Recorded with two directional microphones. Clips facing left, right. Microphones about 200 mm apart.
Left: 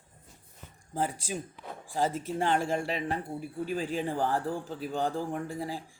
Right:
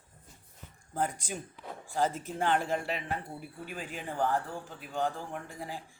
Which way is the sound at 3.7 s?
35° left (ahead or behind).